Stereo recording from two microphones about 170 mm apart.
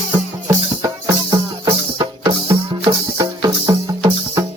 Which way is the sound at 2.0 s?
30° right (ahead or behind).